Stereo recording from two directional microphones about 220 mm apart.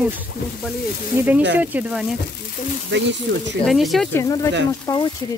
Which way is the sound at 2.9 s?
55° right (ahead or behind).